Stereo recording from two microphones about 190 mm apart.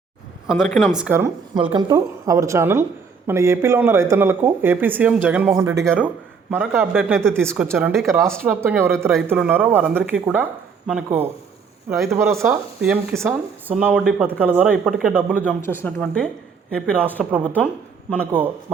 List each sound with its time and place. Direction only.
0.4 s speech: 5° right (ahead or behind)
8.4 s speech: 10° right (ahead or behind)
8.9 s speech: centre (ahead or behind)
15.6 s speech: 10° left (ahead or behind)
18.3 s speech: 10° right (ahead or behind)